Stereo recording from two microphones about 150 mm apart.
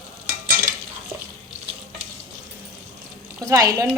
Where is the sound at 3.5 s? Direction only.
20° right (ahead or behind).